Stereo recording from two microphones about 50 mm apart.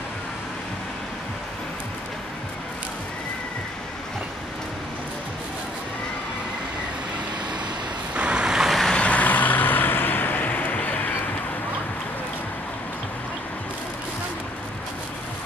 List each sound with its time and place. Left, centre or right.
8.1 s waves: right
8.9 s vehicle: left